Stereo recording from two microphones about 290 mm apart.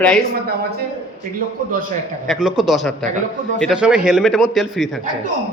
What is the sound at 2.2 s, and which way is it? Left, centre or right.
A man's voice, centre.